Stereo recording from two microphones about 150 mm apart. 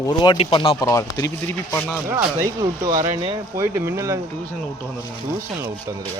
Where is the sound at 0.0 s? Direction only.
30° left (ahead or behind).